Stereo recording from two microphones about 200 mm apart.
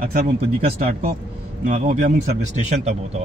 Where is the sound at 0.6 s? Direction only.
50° right (ahead or behind).